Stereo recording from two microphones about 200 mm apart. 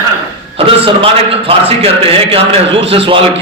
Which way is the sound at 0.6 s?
30° right (ahead or behind).